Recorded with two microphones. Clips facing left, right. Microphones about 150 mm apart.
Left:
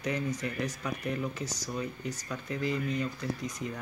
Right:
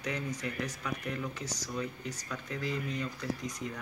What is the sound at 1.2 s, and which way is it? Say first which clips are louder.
A man's voice: left 3 dB; 10° left (ahead or behind).